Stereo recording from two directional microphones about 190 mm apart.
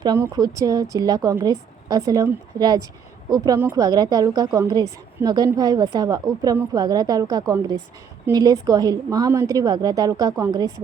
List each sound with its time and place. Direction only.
0.0 s a woman's voice: 20° right (ahead or behind)